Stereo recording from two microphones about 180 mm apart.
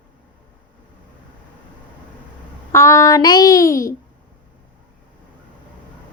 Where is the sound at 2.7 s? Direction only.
15° left (ahead or behind).